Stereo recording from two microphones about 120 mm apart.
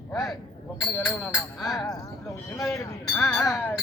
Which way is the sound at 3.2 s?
Centre (ahead or behind).